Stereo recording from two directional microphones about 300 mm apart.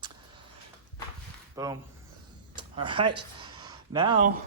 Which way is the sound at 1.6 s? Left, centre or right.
Centre.